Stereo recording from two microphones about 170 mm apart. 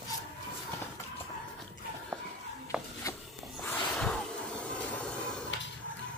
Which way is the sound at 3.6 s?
5° left (ahead or behind).